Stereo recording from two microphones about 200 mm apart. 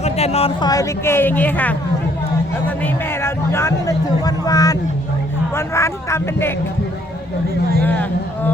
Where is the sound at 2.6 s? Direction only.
10° left (ahead or behind).